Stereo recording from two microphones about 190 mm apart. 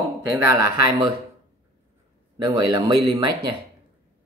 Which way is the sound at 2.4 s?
25° right (ahead or behind).